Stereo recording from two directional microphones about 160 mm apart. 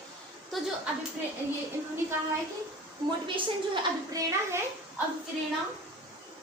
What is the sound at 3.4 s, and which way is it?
Speech, 30° right (ahead or behind).